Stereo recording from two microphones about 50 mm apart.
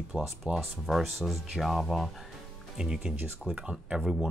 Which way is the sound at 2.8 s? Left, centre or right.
Centre.